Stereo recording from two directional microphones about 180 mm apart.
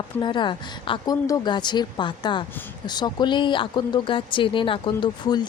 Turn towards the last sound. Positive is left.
turn(degrees=25)  # may be behind; listen again after turning